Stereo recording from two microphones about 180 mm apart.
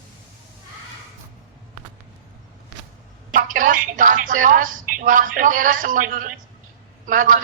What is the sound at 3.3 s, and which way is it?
A woman's voice, 45° right (ahead or behind).